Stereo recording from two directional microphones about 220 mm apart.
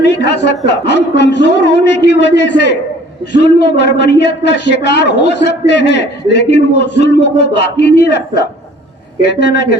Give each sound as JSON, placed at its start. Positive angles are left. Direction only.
{"t": 0.0, "sound": "speech", "side_deg": 50}
{"t": 9.2, "sound": "speech", "side_deg": 50}